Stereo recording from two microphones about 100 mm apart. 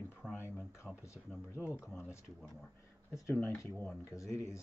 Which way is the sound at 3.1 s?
25° left (ahead or behind).